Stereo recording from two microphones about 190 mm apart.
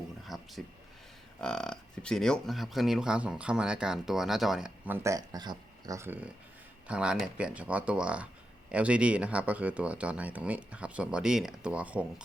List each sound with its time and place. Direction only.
0.3 s a sound: centre (ahead or behind)
1.4 s speech: 5° left (ahead or behind)
5.0 s speech: 20° right (ahead or behind)